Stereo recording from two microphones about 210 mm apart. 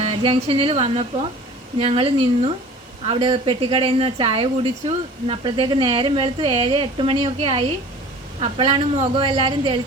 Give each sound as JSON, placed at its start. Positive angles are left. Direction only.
{"t": 0.0, "sound": "speech", "side_deg": -25}